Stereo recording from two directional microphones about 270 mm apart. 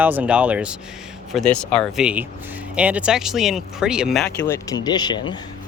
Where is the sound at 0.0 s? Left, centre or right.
Centre.